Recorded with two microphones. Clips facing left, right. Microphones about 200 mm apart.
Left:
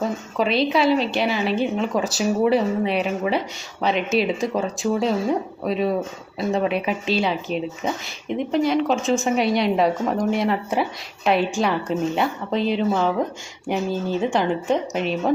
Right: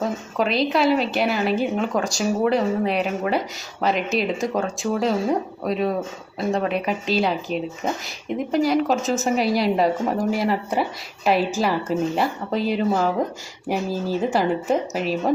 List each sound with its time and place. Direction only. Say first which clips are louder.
0.3 s a woman's voice: left 1 dB; centre (ahead or behind)